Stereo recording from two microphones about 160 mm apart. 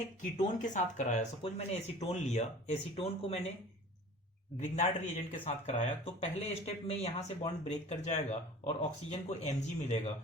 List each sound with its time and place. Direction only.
0.2 s speech: 50° left (ahead or behind)
4.8 s speech: 45° left (ahead or behind)